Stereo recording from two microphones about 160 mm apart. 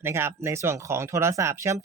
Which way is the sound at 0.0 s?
15° right (ahead or behind).